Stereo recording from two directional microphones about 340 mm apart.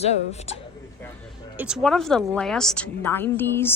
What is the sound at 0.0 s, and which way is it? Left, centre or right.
Speech, centre.